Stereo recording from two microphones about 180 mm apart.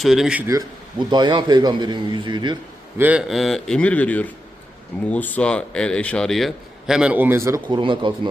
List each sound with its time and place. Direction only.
0.0 s a man's voice: centre (ahead or behind)
0.5 s a man's voice: 25° right (ahead or behind)
3.0 s a man's voice: 5° right (ahead or behind); by 8.3 s 25° right (ahead or behind)